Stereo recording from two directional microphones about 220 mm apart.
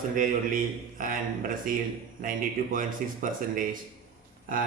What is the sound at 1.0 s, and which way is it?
Speech, 40° right (ahead or behind).